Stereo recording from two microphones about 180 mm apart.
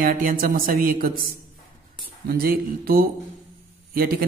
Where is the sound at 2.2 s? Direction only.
55° right (ahead or behind).